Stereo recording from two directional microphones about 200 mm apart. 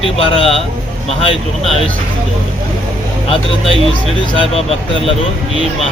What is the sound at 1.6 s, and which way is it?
Speech, centre (ahead or behind).